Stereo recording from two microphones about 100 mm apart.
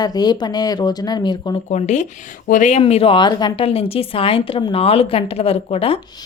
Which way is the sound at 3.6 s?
75° left (ahead or behind).